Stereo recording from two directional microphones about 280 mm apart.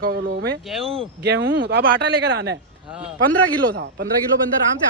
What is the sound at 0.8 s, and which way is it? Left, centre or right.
Speech, centre.